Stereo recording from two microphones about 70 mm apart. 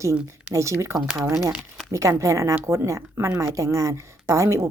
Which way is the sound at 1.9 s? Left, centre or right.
Right.